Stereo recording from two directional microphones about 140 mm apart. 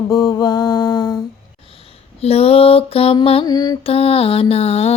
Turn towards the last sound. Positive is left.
turn(degrees=45)  # may be behind; listen again after turning